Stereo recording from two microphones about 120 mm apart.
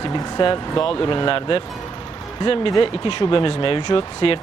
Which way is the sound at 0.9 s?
45° left (ahead or behind).